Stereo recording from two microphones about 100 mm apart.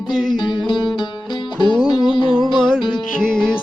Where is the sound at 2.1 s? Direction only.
55° left (ahead or behind).